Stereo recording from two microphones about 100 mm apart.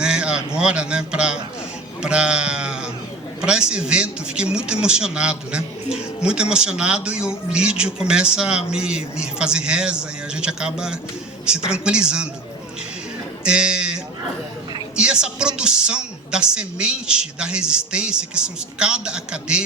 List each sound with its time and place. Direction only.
0.0 s a man's voice: 10° right (ahead or behind)
13.4 s a sound: 10° right (ahead or behind)
14.9 s a man's voice: 10° right (ahead or behind)